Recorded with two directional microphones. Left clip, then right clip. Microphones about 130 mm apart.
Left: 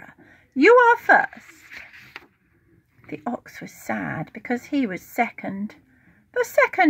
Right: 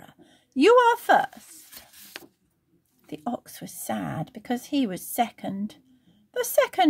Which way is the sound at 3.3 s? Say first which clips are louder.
Left 2 dB; 35° right (ahead or behind).